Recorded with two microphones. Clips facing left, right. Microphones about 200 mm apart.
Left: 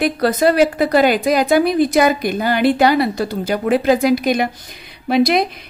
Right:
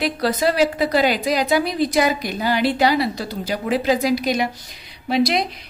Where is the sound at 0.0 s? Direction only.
50° left (ahead or behind).